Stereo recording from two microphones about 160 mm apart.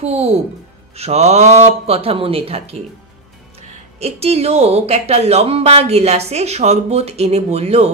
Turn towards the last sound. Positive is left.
turn(degrees=-40)  # may be behind; listen again after turning